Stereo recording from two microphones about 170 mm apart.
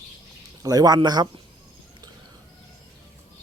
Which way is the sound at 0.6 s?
20° right (ahead or behind).